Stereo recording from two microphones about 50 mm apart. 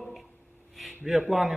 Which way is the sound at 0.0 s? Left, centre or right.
Centre.